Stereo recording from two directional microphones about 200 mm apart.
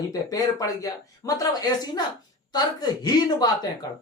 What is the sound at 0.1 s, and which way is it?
Speech, 20° left (ahead or behind).